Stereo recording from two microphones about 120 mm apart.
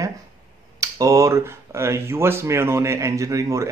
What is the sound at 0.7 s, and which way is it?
Speech, 30° right (ahead or behind).